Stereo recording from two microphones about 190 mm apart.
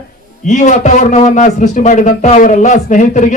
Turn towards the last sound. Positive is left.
turn(degrees=40)  # may be behind; listen again after turning